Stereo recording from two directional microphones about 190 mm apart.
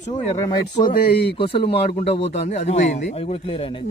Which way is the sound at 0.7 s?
35° left (ahead or behind).